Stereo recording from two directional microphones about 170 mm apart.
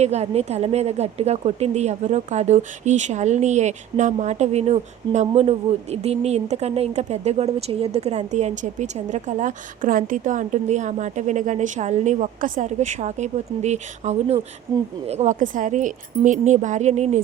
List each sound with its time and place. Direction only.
0.0 s a woman's voice: 40° right (ahead or behind)